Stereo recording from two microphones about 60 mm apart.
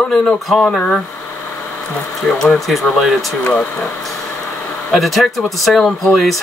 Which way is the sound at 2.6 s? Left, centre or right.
Centre.